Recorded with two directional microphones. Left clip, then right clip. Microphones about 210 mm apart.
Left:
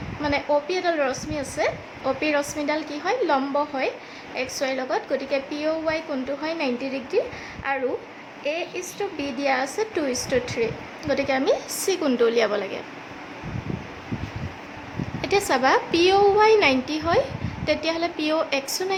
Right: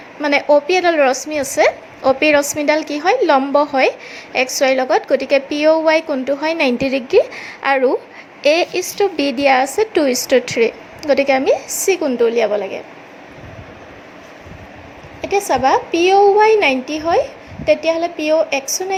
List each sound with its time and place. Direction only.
0.2 s a woman's voice: 30° right (ahead or behind)
15.2 s a woman's voice: 10° right (ahead or behind)